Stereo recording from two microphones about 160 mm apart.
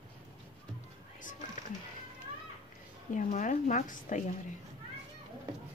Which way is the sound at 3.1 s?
50° left (ahead or behind).